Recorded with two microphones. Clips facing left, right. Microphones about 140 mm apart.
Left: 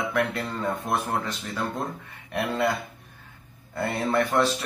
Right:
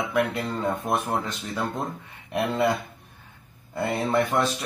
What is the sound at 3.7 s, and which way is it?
Speech, 20° right (ahead or behind).